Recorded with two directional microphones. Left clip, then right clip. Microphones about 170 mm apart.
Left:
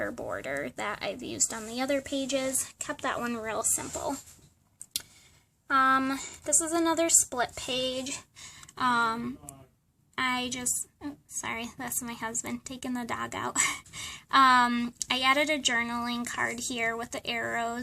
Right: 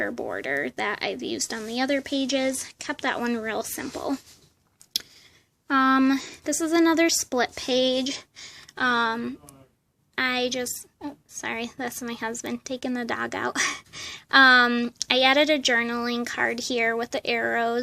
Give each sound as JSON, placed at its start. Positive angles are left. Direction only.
{"t": 0.0, "sound": "a woman's voice", "side_deg": -25}
{"t": 5.6, "sound": "a woman's voice", "side_deg": -25}